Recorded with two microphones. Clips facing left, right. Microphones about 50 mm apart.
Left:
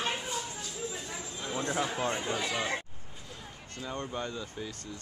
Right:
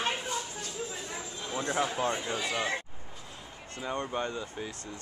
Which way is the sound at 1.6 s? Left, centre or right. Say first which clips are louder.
Right 2 dB; centre.